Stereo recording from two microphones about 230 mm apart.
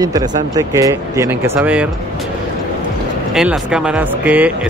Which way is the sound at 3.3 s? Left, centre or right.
Centre.